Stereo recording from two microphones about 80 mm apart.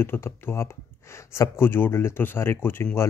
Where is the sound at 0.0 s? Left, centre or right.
Left.